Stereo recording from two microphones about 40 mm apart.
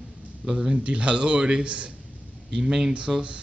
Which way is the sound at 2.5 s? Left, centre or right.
Centre.